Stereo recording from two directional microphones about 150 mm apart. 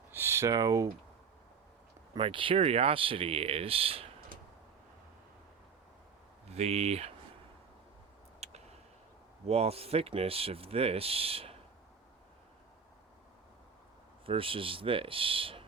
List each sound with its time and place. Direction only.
0.1 s speech: 15° right (ahead or behind)
2.1 s speech: 35° right (ahead or behind)
6.5 s speech: 45° right (ahead or behind)
8.4 s a sound: 45° right (ahead or behind)
9.5 s speech: 40° right (ahead or behind)
14.3 s speech: 35° right (ahead or behind)